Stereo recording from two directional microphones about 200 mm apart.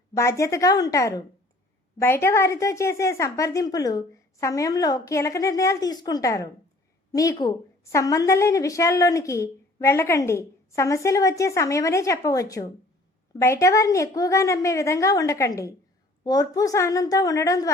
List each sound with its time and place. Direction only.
0.1 s a woman's voice: 15° left (ahead or behind)